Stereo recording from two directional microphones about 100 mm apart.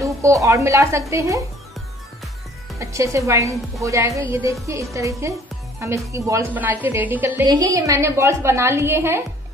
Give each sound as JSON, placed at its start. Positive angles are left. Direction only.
{"t": 0.0, "sound": "a woman's voice", "side_deg": -35}
{"t": 2.8, "sound": "a woman's voice", "side_deg": -30}
{"t": 6.5, "sound": "a woman's voice", "side_deg": -20}
{"t": 7.4, "sound": "a woman's voice", "side_deg": -40}